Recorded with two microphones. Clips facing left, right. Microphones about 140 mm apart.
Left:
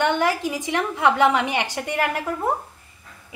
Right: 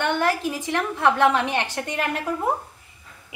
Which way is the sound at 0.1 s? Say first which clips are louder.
Left 1 dB; 15° left (ahead or behind).